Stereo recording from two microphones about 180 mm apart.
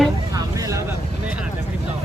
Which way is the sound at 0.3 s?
20° right (ahead or behind).